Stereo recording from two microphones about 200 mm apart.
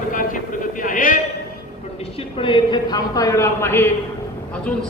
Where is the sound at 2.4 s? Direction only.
25° left (ahead or behind).